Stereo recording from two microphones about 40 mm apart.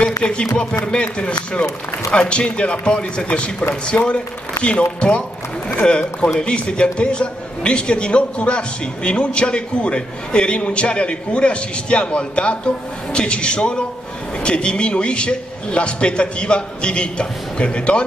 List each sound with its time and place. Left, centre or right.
0.0 s a man's voice: left